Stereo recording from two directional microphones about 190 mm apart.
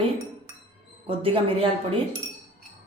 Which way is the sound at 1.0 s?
30° right (ahead or behind).